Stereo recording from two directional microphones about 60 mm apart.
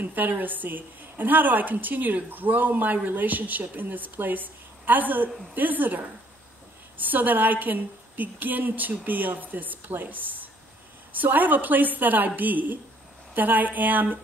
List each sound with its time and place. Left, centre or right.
0.0 s a woman's voice: right